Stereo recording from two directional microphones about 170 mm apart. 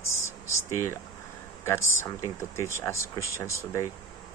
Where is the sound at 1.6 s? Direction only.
15° left (ahead or behind).